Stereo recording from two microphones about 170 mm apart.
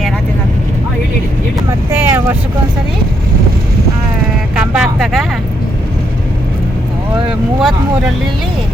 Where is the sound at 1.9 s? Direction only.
15° right (ahead or behind).